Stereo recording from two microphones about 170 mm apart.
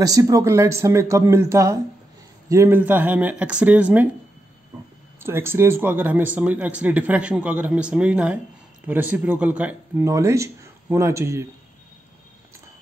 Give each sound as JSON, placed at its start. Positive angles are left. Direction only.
{"t": 0.0, "sound": "speech", "side_deg": -20}
{"t": 5.2, "sound": "speech", "side_deg": -15}